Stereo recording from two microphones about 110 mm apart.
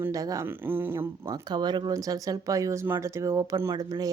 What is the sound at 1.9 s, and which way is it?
Speech, 30° right (ahead or behind).